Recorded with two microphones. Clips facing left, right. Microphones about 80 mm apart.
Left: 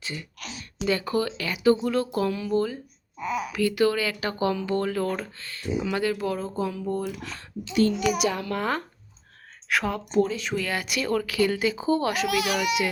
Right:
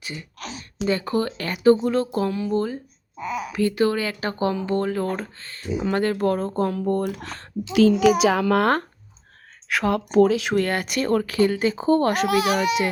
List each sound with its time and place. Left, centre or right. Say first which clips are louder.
0.0 s speech: right 1 dB; right
0.3 s a sound: right 4 dB; right
1.3 s speech: right 6 dB; right
3.2 s speech: even; centre
3.5 s speech: right 2 dB; right
8.3 s a child's voice: right 9 dB; right
9.6 s speech: right 3 dB; centre
9.9 s speech: right 10 dB; right
10.6 s speech: right 5 dB; right